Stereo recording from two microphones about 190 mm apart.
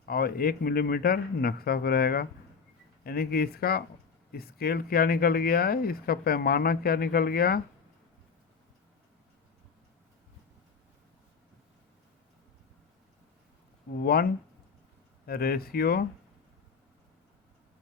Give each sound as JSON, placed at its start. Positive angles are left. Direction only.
{"t": 0.0, "sound": "speech", "side_deg": 55}
{"t": 14.0, "sound": "speech", "side_deg": 55}
{"t": 15.3, "sound": "speech", "side_deg": 50}